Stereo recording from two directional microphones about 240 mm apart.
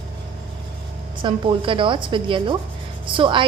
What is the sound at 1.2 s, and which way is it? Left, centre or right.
A woman's voice, centre.